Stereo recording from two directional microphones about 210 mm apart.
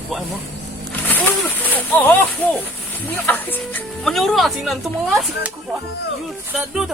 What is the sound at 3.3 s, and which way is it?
Speech, 10° left (ahead or behind).